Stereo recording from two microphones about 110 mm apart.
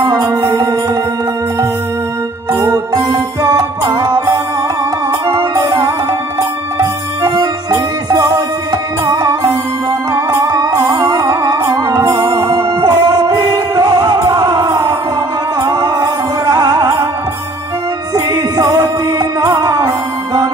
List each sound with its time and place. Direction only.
0.0 s music: 35° right (ahead or behind)
2.6 s music: 30° right (ahead or behind)
5.5 s music: 30° right (ahead or behind)
18.1 s music: 30° right (ahead or behind)